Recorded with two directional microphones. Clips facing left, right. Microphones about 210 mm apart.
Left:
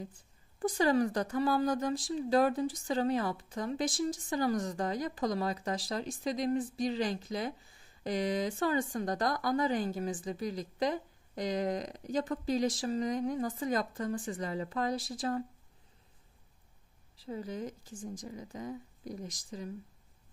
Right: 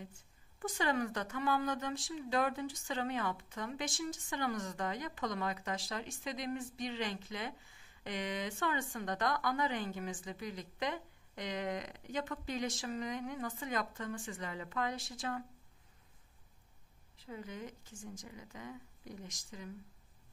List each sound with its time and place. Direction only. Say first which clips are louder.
0.6 s speech: left 7 dB; 35° left (ahead or behind)
17.2 s speech: left 7 dB; 35° left (ahead or behind)